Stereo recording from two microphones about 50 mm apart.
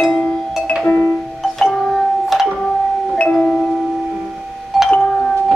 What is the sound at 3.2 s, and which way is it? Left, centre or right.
Music, left.